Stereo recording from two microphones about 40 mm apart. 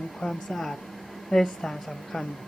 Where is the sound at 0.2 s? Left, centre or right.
Centre.